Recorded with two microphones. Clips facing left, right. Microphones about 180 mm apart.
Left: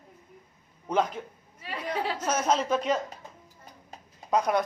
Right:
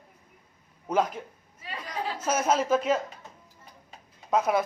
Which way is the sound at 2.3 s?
10° right (ahead or behind).